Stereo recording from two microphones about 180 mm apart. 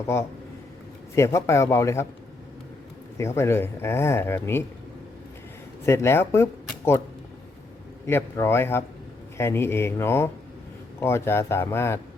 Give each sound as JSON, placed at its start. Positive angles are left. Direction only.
{"t": 1.1, "sound": "speech", "side_deg": 15}
{"t": 3.2, "sound": "speech", "side_deg": 15}
{"t": 5.8, "sound": "speech", "side_deg": 15}
{"t": 8.0, "sound": "speech", "side_deg": 15}